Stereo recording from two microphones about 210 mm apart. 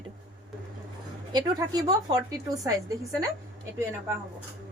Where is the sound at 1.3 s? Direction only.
20° right (ahead or behind).